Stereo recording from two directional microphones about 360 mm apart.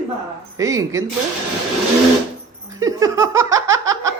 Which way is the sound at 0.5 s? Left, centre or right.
Centre.